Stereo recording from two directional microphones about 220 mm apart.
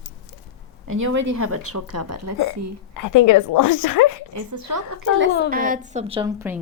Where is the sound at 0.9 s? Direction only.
60° right (ahead or behind); by 2.1 s 90° right.